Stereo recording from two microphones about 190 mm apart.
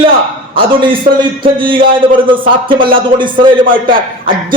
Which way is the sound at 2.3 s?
25° right (ahead or behind).